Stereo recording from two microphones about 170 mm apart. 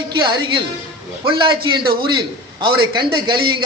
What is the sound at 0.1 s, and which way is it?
A man's voice, 25° right (ahead or behind).